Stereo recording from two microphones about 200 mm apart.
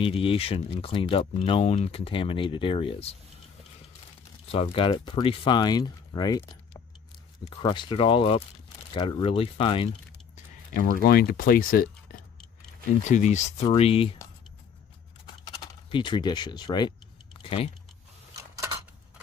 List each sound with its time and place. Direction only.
0.0 s speech: 25° left (ahead or behind)
4.5 s speech: 30° left (ahead or behind)
10.3 s speech: 40° left (ahead or behind)
13.1 s speech: 35° left (ahead or behind)
15.4 s speech: 20° left (ahead or behind)
17.4 s typing: 30° left (ahead or behind)